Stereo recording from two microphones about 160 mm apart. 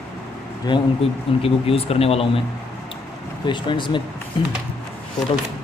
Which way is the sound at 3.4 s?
30° left (ahead or behind).